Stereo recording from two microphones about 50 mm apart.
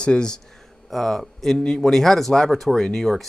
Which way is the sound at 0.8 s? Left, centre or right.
Centre.